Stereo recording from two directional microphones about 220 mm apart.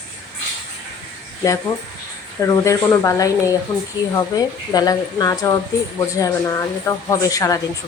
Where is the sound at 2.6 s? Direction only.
15° left (ahead or behind).